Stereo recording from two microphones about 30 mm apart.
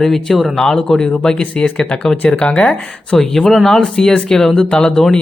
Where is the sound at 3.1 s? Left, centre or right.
Centre.